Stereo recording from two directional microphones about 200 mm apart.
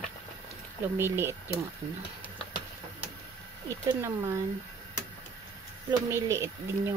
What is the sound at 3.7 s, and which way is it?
Speech, 15° right (ahead or behind).